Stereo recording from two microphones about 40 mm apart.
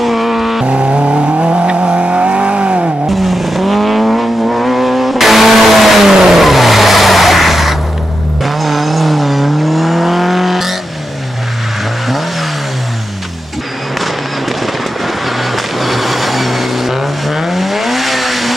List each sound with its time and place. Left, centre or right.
0.0 s vehicle: centre
0.7 s vehicle: right
3.1 s vehicle: centre
15.0 s vehicle: centre